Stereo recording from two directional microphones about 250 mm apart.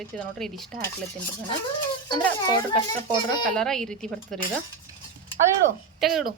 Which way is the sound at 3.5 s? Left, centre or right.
Centre.